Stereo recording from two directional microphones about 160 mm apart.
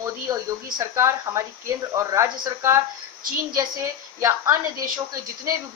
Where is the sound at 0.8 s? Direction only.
20° right (ahead or behind).